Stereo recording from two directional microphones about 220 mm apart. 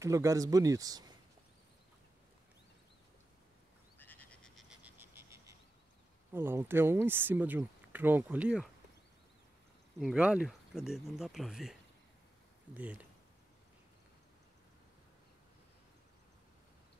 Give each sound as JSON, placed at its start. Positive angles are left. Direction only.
{"t": 0.0, "sound": "speech", "side_deg": -15}
{"t": 4.0, "sound": "frog", "side_deg": 10}
{"t": 6.3, "sound": "speech", "side_deg": -10}
{"t": 9.9, "sound": "speech", "side_deg": -5}
{"t": 12.7, "sound": "speech", "side_deg": -5}